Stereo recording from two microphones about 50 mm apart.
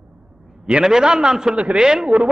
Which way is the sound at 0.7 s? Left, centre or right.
Centre.